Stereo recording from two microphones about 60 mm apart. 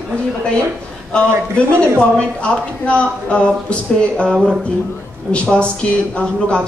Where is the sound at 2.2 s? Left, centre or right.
Centre.